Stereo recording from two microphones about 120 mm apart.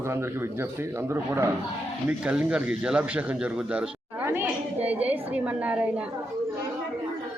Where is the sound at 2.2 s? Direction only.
10° right (ahead or behind).